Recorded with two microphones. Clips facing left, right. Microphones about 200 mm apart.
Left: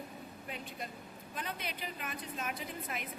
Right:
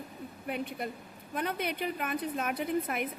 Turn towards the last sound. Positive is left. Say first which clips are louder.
# right 11 dB
turn(degrees=-60)  # may be behind; listen again after turning